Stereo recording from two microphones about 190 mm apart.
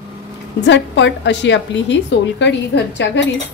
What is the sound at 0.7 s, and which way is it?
A woman's voice, 70° left (ahead or behind).